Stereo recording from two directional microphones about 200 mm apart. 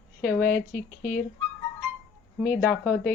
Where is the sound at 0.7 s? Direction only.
40° left (ahead or behind).